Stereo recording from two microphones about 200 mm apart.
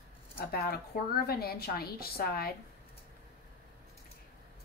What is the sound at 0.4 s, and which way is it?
Speech, 50° left (ahead or behind).